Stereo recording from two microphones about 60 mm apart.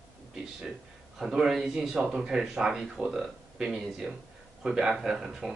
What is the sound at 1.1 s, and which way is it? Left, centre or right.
Speech, centre.